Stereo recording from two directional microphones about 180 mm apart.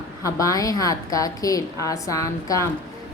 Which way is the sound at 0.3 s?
20° left (ahead or behind).